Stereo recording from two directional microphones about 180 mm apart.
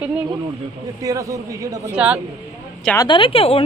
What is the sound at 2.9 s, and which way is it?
Speech, 25° left (ahead or behind).